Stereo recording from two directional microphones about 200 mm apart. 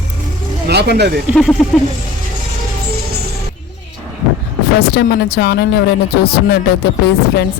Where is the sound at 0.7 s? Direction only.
55° right (ahead or behind).